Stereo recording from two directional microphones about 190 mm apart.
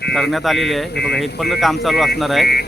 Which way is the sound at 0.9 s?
60° left (ahead or behind).